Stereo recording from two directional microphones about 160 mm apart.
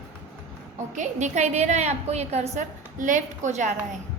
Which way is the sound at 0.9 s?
50° right (ahead or behind).